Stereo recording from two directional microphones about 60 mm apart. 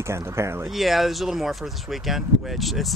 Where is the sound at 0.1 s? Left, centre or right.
Right.